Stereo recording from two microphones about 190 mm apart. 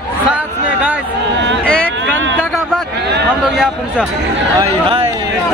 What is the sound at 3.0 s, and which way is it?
Chatter, 60° right (ahead or behind).